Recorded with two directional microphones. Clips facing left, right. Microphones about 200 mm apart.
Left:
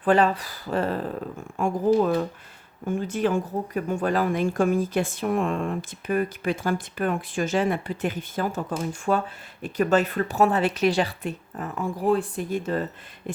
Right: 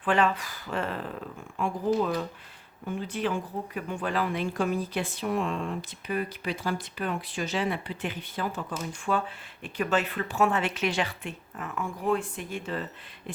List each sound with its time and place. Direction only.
0.0 s speech: 40° left (ahead or behind)